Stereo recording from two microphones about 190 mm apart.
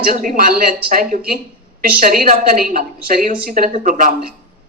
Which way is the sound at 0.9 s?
45° right (ahead or behind).